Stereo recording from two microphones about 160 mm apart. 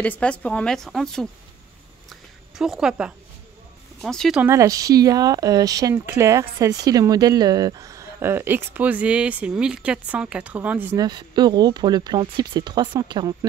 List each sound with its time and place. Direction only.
0.0 s a woman's voice: 10° left (ahead or behind)
2.0 s a sound: centre (ahead or behind)
4.0 s a woman's voice: 5° left (ahead or behind)
4.4 s speech: 15° right (ahead or behind)
11.0 s speech: 25° right (ahead or behind)